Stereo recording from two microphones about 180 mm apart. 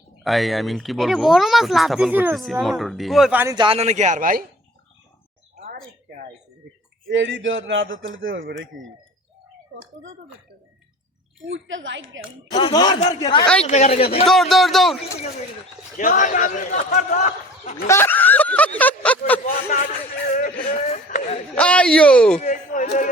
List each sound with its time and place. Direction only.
0.2 s speech: centre (ahead or behind)
3.4 s speech: 25° right (ahead or behind); by 4.4 s 50° right (ahead or behind)
7.1 s speech: 90° right
8.4 s speech: 70° right (ahead or behind)
11.4 s speech: 90° right
12.5 s speech: 20° left (ahead or behind)
13.6 s speech: 40° left (ahead or behind)
14.3 s speech: centre (ahead or behind)
16.0 s a man's voice: 45° left (ahead or behind)
17.8 s speech: 15° left (ahead or behind)
20.3 s a man's voice: 45° left (ahead or behind)
21.5 s speech: 5° left (ahead or behind)
22.4 s a man's voice: 45° left (ahead or behind)